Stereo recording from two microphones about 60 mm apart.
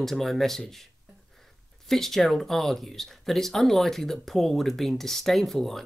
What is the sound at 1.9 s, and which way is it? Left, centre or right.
Speech, centre.